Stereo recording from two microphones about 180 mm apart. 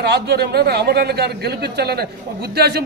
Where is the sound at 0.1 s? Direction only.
65° right (ahead or behind).